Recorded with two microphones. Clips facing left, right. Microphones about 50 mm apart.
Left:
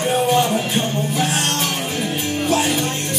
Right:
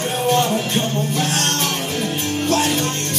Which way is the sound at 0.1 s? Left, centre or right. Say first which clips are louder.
Left 1 dB; centre.